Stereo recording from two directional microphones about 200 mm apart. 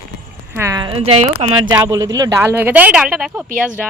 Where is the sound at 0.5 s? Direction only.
15° right (ahead or behind).